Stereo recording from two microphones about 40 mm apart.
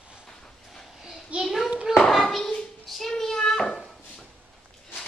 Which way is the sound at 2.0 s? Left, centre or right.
Centre.